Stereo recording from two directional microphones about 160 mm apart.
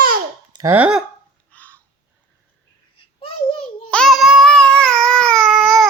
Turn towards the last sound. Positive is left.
turn(degrees=0)  # may be behind; listen again after turning